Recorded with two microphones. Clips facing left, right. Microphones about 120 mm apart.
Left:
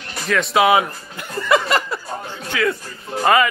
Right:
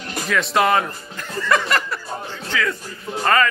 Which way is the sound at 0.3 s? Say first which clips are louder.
Left 3 dB; centre (ahead or behind).